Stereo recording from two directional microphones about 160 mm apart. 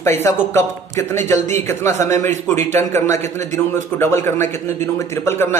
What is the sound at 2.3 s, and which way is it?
Speech, 50° right (ahead or behind).